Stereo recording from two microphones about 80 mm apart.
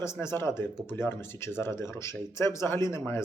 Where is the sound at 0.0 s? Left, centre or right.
Left.